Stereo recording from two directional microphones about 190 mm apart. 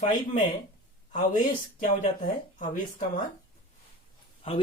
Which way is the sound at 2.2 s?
45° left (ahead or behind).